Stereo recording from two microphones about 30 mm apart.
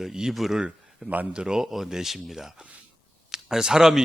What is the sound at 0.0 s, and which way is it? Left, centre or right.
Speech, centre.